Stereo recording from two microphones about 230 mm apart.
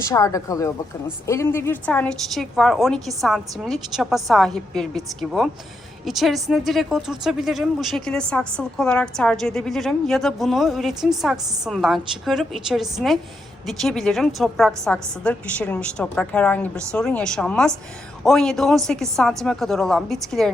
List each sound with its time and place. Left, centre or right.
0.1 s a woman's voice: centre